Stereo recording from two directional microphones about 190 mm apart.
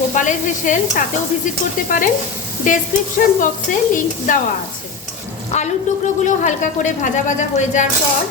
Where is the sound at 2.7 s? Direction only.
45° left (ahead or behind).